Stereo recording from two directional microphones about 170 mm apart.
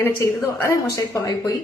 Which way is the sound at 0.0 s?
15° left (ahead or behind).